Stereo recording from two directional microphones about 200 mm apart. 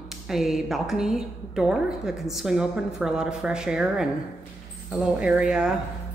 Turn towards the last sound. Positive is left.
turn(degrees=-5)  # may be behind; listen again after turning